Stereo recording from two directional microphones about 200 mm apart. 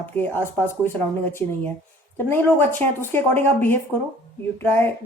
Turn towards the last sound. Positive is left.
turn(degrees=10)  # may be behind; listen again after turning